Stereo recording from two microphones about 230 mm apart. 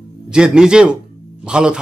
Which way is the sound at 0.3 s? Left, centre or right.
Centre.